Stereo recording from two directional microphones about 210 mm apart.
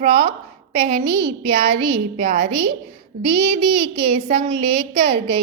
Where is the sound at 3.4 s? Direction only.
25° right (ahead or behind).